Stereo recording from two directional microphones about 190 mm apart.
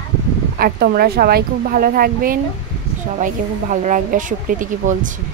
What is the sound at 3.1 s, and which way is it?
A woman's voice, 40° right (ahead or behind).